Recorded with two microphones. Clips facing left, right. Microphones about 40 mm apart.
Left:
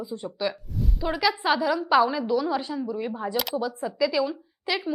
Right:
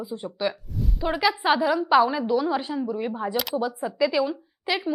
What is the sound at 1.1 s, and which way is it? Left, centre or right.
A woman's voice, centre.